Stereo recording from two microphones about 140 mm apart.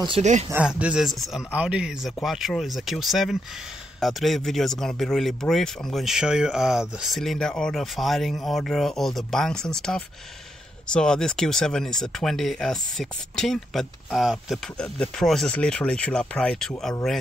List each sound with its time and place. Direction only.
0.2 s speech: 55° right (ahead or behind)
0.5 s a man's voice: 10° right (ahead or behind)